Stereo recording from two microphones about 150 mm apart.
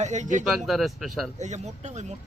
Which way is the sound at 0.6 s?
Centre (ahead or behind).